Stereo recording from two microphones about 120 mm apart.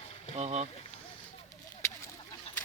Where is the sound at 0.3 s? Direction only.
70° right (ahead or behind).